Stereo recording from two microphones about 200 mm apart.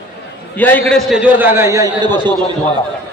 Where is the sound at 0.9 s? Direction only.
5° right (ahead or behind); by 2.3 s 20° right (ahead or behind).